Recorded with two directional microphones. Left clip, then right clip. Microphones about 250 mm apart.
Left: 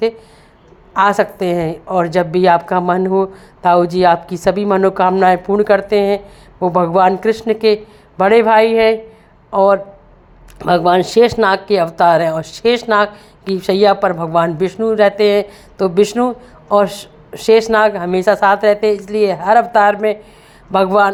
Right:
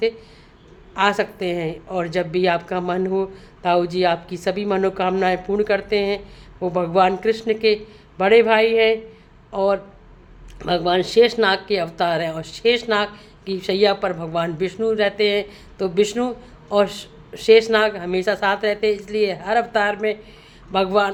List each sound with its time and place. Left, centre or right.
0.9 s a woman's voice: centre